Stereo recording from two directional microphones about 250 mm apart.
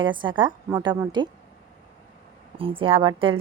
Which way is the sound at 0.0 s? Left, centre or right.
Centre.